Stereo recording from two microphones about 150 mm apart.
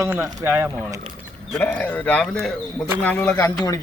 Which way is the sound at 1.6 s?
10° left (ahead or behind).